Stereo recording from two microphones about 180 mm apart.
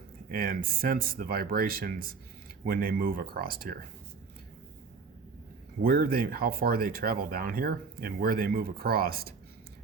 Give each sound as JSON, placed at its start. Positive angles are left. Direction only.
{"t": 0.3, "sound": "speech", "side_deg": -50}
{"t": 5.8, "sound": "speech", "side_deg": -55}